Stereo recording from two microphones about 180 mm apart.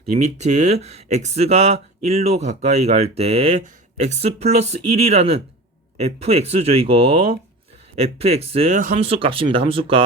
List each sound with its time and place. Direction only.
0.0 s speech: 40° right (ahead or behind)